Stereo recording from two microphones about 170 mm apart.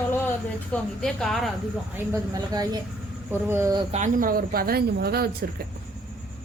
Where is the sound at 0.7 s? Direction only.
5° left (ahead or behind).